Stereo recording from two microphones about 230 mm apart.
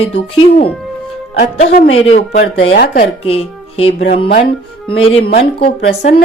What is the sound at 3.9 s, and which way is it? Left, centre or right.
Speech, left.